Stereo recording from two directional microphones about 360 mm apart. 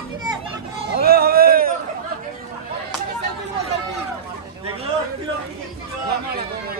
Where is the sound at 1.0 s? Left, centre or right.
Right.